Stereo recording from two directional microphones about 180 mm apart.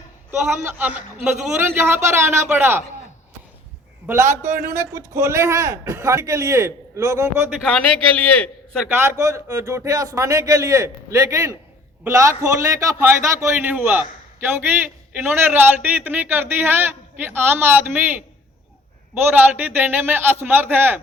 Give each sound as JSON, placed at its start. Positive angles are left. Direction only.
{"t": 0.3, "sound": "a man's voice", "side_deg": -10}
{"t": 4.0, "sound": "a man's voice", "side_deg": -15}
{"t": 8.1, "sound": "a man's voice", "side_deg": 10}
{"t": 9.0, "sound": "a man's voice", "side_deg": -15}
{"t": 19.3, "sound": "a man's voice", "side_deg": -10}